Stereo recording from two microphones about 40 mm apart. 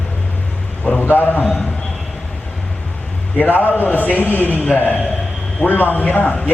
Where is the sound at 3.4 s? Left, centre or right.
Left.